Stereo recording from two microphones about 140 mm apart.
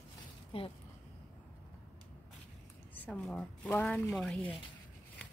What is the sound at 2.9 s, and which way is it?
Speech, 10° left (ahead or behind).